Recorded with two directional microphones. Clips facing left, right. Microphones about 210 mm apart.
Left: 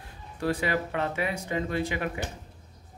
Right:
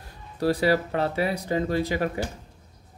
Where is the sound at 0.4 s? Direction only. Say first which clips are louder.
Right 6 dB; 35° right (ahead or behind).